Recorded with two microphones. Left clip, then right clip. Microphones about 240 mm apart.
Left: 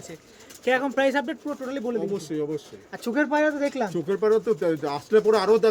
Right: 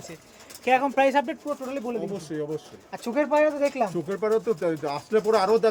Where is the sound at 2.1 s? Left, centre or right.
Centre.